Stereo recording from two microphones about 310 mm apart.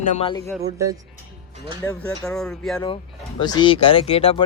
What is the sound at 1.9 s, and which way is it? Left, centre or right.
Speech, centre.